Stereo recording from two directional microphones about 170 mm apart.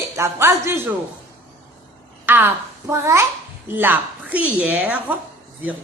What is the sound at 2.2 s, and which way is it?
A child's voice, 10° right (ahead or behind).